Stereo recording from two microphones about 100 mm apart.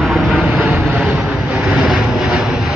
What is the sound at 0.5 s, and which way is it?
Vehicle, 15° right (ahead or behind).